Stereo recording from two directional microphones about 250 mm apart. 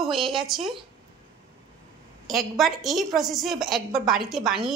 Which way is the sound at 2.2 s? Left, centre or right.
Centre.